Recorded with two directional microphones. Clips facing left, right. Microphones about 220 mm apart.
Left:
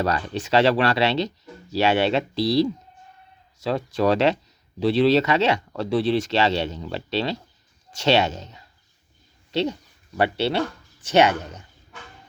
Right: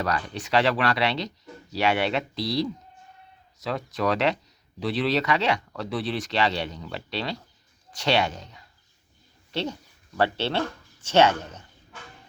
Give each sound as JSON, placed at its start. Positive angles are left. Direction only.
{"t": 0.0, "sound": "speech", "side_deg": 25}